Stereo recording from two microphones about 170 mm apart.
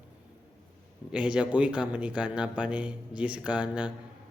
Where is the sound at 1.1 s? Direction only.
5° right (ahead or behind).